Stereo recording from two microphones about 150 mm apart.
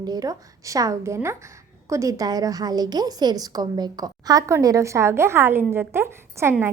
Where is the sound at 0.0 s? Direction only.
25° right (ahead or behind).